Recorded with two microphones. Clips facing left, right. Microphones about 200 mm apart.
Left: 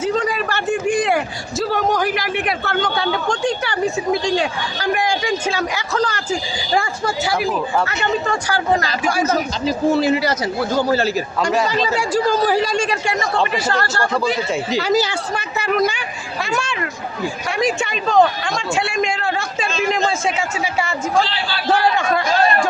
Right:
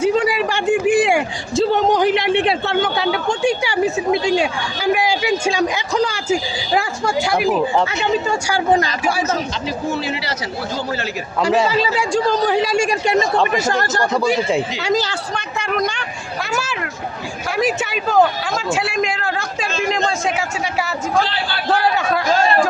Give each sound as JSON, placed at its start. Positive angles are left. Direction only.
{"t": 0.0, "sound": "a sound", "side_deg": -10}
{"t": 1.5, "sound": "a man's voice", "side_deg": -25}
{"t": 2.8, "sound": "speech", "side_deg": -5}
{"t": 7.5, "sound": "speech", "side_deg": -10}
{"t": 10.0, "sound": "a man's voice", "side_deg": 40}
{"t": 11.7, "sound": "speech", "side_deg": 0}
{"t": 12.7, "sound": "speech", "side_deg": -10}
{"t": 14.8, "sound": "speech", "side_deg": 0}
{"t": 21.7, "sound": "speech", "side_deg": 0}